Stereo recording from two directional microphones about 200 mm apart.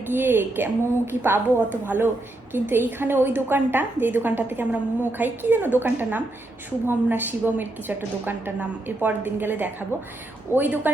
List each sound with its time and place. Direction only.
0.1 s a woman's voice: 10° right (ahead or behind)